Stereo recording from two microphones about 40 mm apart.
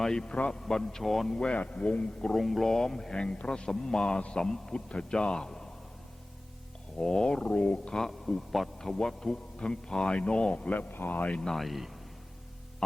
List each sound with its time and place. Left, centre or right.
0.0 s a man's voice: centre
1.5 s a man's voice: left
2.3 s speech: centre
2.7 s a man's voice: centre
7.0 s a man's voice: centre
7.9 s a man's voice: centre; by 10.7 s left
10.7 s speech: left
11.3 s a man's voice: centre
11.6 s speech: centre